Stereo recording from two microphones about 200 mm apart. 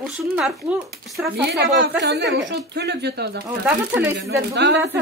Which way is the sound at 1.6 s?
60° right (ahead or behind).